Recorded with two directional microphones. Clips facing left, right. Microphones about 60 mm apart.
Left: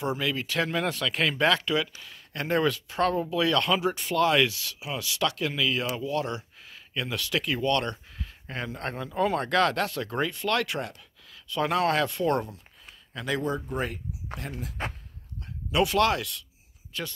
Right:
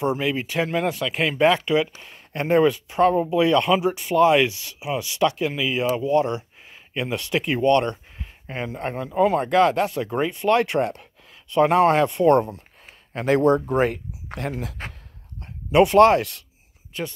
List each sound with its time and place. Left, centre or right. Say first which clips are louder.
0.0 s speech: right 6 dB; right
12.5 s speech: right 4 dB; right
15.4 s speech: right 9 dB; right